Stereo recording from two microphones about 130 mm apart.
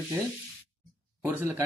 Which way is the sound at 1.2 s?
15° right (ahead or behind).